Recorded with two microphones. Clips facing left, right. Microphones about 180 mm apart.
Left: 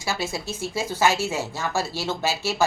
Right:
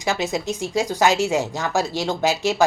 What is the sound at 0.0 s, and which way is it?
Speech, 20° right (ahead or behind).